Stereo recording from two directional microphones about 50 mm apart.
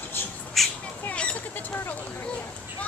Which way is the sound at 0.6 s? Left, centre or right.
Centre.